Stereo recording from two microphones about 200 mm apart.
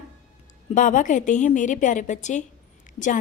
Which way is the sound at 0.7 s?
40° left (ahead or behind).